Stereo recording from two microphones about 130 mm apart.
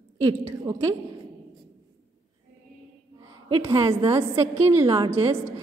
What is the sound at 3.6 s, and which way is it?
Speech, 20° right (ahead or behind).